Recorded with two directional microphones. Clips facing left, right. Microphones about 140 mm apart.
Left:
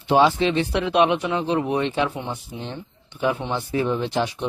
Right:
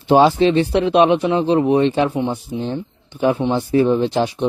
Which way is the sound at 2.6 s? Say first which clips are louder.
Right 9 dB; 35° right (ahead or behind).